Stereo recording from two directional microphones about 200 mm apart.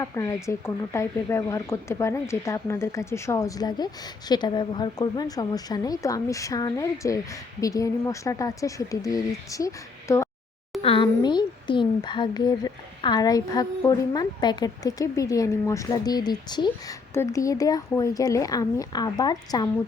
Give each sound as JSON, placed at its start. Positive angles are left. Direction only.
{"t": 0.0, "sound": "a woman's voice", "side_deg": 15}